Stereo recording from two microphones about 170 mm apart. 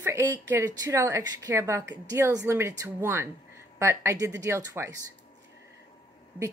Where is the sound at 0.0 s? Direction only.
15° right (ahead or behind).